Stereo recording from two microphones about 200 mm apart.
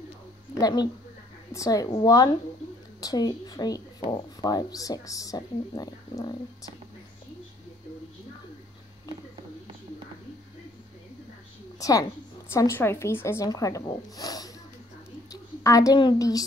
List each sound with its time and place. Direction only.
0.6 s a woman's voice: 20° left (ahead or behind)
11.8 s speech: 15° left (ahead or behind)
15.6 s speech: 15° left (ahead or behind)